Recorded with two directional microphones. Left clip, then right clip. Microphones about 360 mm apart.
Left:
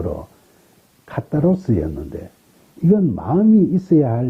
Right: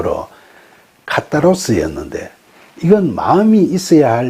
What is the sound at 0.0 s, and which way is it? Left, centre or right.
Speech, centre.